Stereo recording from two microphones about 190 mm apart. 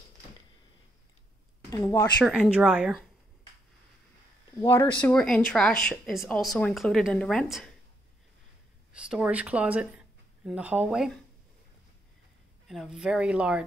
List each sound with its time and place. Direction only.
1.7 s speech: 15° left (ahead or behind)
2.2 s speech: centre (ahead or behind)
4.6 s speech: 15° left (ahead or behind)
8.9 s speech: 5° right (ahead or behind)
12.6 s speech: centre (ahead or behind)